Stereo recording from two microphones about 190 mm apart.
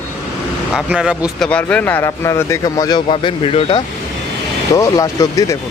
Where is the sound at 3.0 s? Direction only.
30° left (ahead or behind).